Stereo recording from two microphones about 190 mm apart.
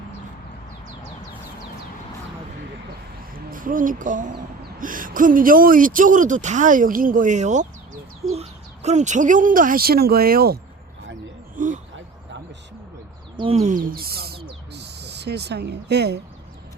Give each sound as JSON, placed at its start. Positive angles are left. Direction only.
{"t": 3.3, "sound": "speech", "side_deg": -45}
{"t": 11.5, "sound": "a sound", "side_deg": -45}
{"t": 13.4, "sound": "speech", "side_deg": -35}